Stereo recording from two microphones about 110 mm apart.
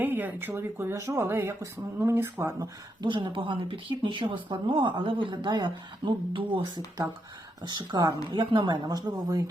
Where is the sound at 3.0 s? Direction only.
50° right (ahead or behind).